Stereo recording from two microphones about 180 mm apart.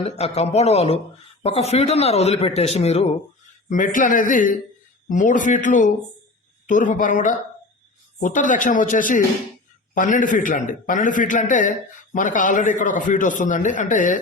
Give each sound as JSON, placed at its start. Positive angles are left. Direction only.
{"t": 0.0, "sound": "a man's voice", "side_deg": 35}